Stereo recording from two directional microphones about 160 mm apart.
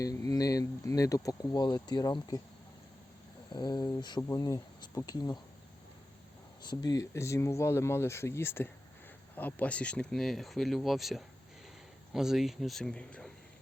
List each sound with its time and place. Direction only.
0.0 s speech: 20° left (ahead or behind)
3.5 s speech: 25° left (ahead or behind)
6.6 s speech: 25° left (ahead or behind); by 13.3 s 5° left (ahead or behind)